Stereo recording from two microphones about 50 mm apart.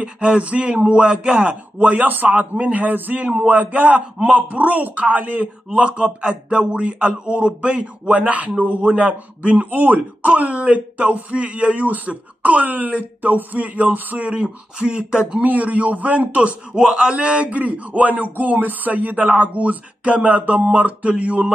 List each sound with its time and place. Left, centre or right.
0.0 s a man's voice: right
14.4 s speech: centre
15.3 s a man's voice: right
16.7 s a man's voice: centre